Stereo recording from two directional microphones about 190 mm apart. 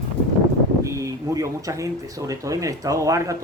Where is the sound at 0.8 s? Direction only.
15° right (ahead or behind).